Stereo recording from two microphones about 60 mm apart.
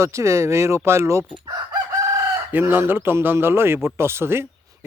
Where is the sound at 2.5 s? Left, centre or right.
Right.